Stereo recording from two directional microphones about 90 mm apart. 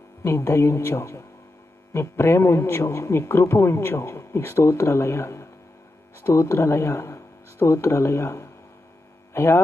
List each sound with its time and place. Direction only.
0.2 s a man's voice: 30° left (ahead or behind)